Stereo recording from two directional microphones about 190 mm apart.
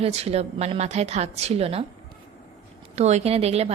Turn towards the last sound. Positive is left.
turn(degrees=-35)  # may be behind; listen again after turning